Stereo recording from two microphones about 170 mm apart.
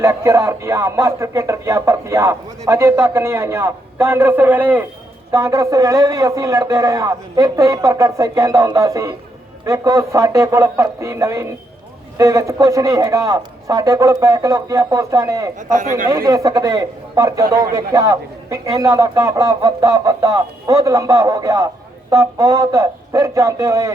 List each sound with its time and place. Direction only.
0.0 s a man's voice: 15° right (ahead or behind)
15.5 s speech: 50° right (ahead or behind)
16.0 s a man's voice: 20° right (ahead or behind)